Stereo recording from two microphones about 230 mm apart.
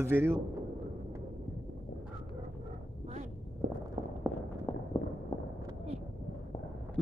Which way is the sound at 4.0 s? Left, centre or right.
Centre.